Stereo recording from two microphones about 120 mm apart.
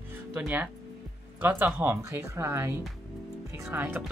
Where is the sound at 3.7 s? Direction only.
15° right (ahead or behind).